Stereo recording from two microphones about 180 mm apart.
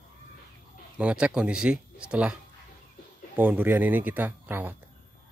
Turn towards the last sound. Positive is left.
turn(degrees=-10)  # may be behind; listen again after turning